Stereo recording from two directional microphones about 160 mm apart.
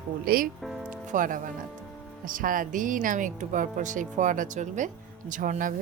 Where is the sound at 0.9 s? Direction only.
55° right (ahead or behind).